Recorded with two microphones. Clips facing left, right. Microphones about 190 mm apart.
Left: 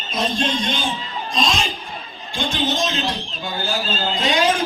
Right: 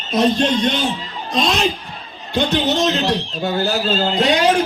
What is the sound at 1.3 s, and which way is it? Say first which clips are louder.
A man's voice: right 5 dB; 65° right (ahead or behind).